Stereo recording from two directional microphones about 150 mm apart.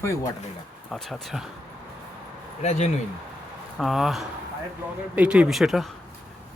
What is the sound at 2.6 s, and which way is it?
Speech, 50° left (ahead or behind).